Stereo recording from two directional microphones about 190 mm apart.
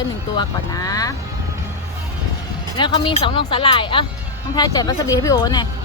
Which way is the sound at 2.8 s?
25° left (ahead or behind).